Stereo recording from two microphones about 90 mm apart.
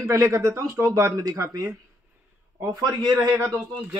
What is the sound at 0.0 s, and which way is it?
Speech, 25° right (ahead or behind).